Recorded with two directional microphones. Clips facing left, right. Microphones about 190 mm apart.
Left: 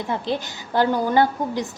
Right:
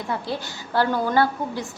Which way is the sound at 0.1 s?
20° left (ahead or behind).